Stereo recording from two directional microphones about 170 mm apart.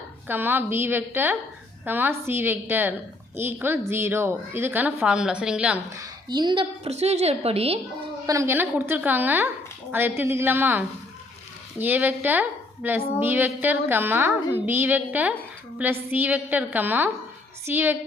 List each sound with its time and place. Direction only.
0.3 s a woman's voice: 10° right (ahead or behind)
6.0 s a woman's voice: 25° right (ahead or behind)
8.3 s a woman's voice: 15° right (ahead or behind)